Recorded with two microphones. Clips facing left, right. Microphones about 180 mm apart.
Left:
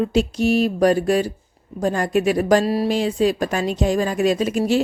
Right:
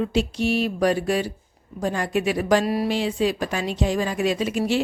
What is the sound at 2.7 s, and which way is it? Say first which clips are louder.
Speech: left 3 dB; 30° left (ahead or behind).